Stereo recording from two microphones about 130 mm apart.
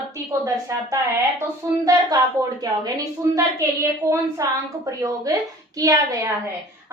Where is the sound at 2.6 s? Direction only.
30° right (ahead or behind).